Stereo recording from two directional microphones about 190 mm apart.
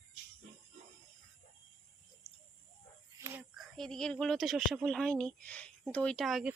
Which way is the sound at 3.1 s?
15° right (ahead or behind).